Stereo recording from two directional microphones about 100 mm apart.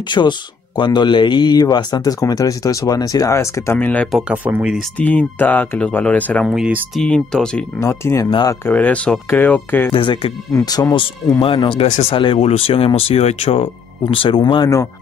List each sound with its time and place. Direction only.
0.1 s speech: 50° left (ahead or behind); by 3.7 s 30° left (ahead or behind)
3.7 s speech: 15° left (ahead or behind)
4.3 s speech: 15° right (ahead or behind)
4.9 s speech: 15° left (ahead or behind)
6.4 s speech: 5° right (ahead or behind)
7.0 s speech: 5° left (ahead or behind)
7.8 s speech: 25° left (ahead or behind)
8.6 s speech: 15° left (ahead or behind)
9.9 s speech: 60° left (ahead or behind)
10.5 s speech: 40° left (ahead or behind)
11.4 s speech: 60° left (ahead or behind); by 13.7 s 75° left (ahead or behind)
14.1 s speech: 60° left (ahead or behind)